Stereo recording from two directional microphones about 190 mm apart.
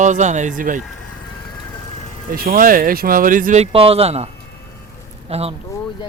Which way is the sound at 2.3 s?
50° right (ahead or behind).